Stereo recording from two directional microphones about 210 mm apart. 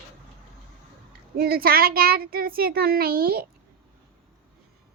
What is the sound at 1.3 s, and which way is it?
A child's voice, 45° right (ahead or behind).